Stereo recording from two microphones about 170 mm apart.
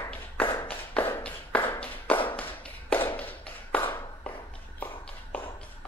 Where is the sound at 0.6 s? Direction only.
10° left (ahead or behind).